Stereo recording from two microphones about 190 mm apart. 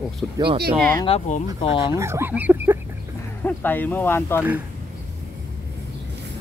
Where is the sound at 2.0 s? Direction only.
15° right (ahead or behind).